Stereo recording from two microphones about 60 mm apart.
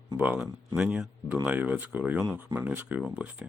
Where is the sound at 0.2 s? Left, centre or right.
Centre.